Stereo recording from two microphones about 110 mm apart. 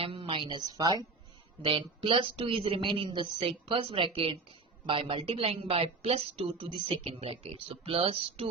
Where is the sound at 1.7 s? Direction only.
55° right (ahead or behind).